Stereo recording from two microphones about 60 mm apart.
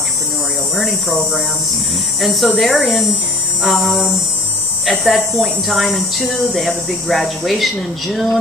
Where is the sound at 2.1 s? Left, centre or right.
Centre.